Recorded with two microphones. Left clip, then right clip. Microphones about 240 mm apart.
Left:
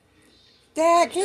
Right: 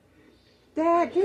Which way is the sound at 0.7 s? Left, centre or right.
Left.